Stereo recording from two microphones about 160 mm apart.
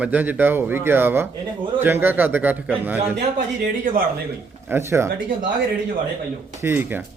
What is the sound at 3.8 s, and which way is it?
Speech, 60° right (ahead or behind).